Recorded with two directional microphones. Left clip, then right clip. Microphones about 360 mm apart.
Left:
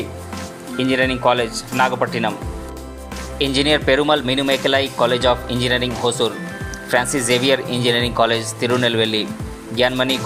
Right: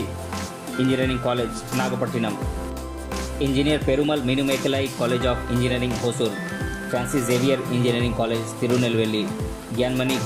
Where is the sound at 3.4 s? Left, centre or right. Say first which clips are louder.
Left 6 dB; centre.